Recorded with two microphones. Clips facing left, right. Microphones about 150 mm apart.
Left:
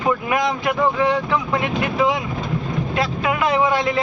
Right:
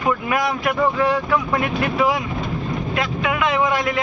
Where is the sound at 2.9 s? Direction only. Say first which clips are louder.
Left 2 dB; 30° left (ahead or behind).